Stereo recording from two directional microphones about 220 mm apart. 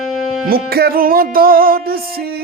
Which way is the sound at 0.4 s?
45° right (ahead or behind).